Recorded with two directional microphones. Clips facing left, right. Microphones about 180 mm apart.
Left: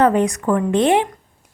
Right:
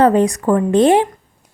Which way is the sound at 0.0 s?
35° right (ahead or behind).